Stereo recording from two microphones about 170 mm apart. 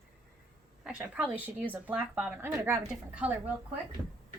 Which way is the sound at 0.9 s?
5° right (ahead or behind).